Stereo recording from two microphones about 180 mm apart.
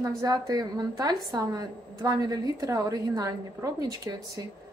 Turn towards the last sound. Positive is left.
turn(degrees=-20)  # may be behind; listen again after turning